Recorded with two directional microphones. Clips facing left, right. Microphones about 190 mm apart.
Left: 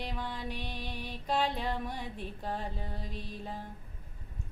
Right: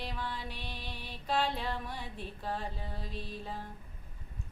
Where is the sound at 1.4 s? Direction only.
15° left (ahead or behind).